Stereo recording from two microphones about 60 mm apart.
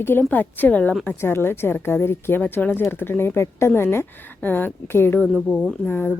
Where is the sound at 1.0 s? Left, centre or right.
Left.